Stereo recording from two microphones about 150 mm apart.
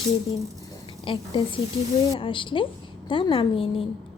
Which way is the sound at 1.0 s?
35° left (ahead or behind).